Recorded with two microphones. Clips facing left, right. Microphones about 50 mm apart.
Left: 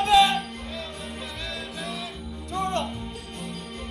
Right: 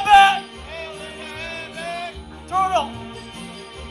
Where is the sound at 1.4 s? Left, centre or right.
Right.